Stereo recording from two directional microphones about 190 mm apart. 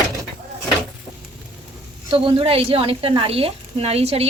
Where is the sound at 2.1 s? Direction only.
30° right (ahead or behind).